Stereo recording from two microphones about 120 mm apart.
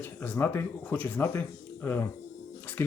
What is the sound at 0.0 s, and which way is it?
Speech, 15° left (ahead or behind).